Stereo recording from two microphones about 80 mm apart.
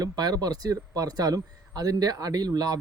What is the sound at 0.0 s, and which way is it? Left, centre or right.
Speech, right.